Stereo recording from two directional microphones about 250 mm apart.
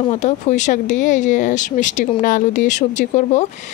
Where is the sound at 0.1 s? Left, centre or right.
Left.